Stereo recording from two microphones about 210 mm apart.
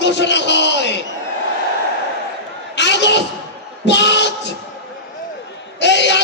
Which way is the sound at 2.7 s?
55° left (ahead or behind).